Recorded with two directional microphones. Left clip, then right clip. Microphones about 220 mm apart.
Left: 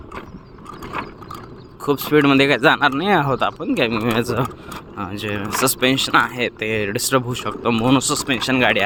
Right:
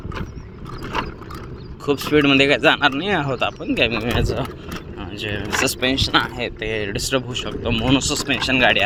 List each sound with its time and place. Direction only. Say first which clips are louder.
1.8 s speech: left 1 dB; 20° left (ahead or behind)